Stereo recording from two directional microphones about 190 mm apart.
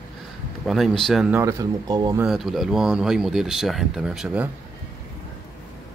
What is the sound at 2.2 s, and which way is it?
Speech, centre (ahead or behind).